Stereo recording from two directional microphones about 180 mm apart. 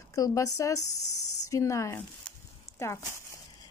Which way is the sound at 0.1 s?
20° left (ahead or behind).